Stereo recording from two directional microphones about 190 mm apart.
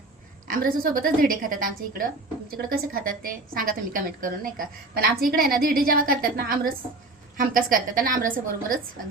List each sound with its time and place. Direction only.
0.4 s a woman's voice: 50° right (ahead or behind)